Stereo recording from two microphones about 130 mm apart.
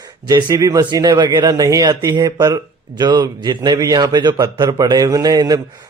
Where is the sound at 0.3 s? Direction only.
30° right (ahead or behind).